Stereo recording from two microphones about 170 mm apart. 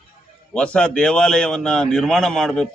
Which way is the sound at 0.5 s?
5° left (ahead or behind).